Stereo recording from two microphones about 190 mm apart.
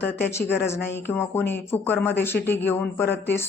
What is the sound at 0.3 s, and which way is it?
Speech, 15° left (ahead or behind).